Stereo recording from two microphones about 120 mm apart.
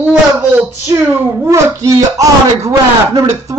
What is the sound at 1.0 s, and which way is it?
Speech, 25° right (ahead or behind).